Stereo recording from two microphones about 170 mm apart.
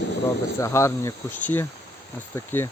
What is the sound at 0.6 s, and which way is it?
Speech, 15° left (ahead or behind).